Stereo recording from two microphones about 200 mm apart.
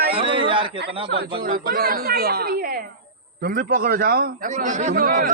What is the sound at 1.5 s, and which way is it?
A man's voice, 45° right (ahead or behind).